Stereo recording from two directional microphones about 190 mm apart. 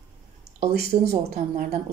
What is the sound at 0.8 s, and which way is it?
Speech, 55° right (ahead or behind).